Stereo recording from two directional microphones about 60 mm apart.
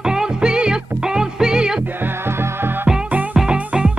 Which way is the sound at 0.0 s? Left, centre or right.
Centre.